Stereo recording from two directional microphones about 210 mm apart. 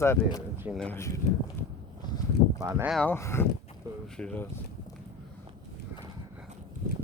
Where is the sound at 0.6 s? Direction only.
5° right (ahead or behind).